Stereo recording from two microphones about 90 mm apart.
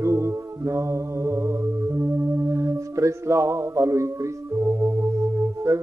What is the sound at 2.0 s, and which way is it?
Mantra, 35° right (ahead or behind).